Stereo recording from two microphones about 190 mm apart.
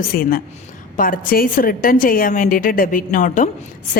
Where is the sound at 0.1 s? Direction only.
50° left (ahead or behind).